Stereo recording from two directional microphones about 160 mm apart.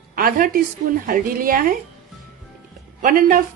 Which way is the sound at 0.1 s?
65° right (ahead or behind).